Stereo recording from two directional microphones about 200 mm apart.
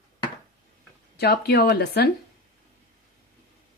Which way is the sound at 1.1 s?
55° left (ahead or behind).